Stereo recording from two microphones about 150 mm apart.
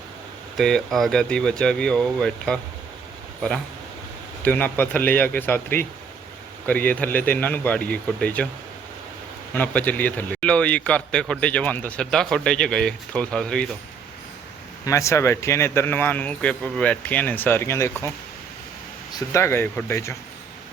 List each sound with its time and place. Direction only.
0.5 s speech: centre (ahead or behind)
4.4 s a man's voice: 10° left (ahead or behind)
9.6 s a man's voice: 10° left (ahead or behind)
14.8 s a man's voice: 20° left (ahead or behind)
19.1 s a man's voice: 20° left (ahead or behind)